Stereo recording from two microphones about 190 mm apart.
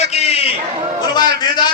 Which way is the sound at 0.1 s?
35° left (ahead or behind).